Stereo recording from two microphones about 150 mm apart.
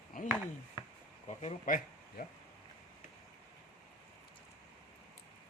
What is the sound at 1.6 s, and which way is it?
Speech, 65° left (ahead or behind).